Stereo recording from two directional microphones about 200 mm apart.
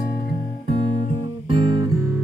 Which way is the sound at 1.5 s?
20° right (ahead or behind).